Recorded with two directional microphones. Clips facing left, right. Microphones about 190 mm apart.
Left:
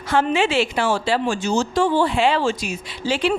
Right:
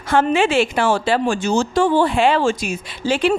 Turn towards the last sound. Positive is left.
turn(degrees=-50)  # may be behind; listen again after turning